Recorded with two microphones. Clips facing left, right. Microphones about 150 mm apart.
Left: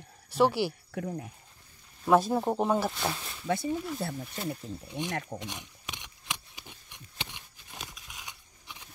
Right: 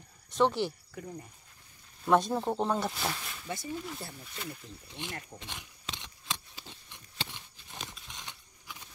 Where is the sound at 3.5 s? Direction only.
65° left (ahead or behind).